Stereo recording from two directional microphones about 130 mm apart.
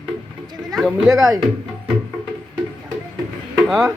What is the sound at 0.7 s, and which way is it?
Speech, centre (ahead or behind).